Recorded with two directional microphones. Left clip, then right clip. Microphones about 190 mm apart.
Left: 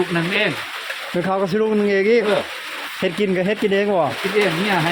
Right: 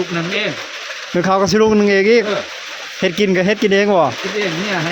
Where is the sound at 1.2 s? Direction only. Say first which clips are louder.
Right 7 dB; 30° right (ahead or behind).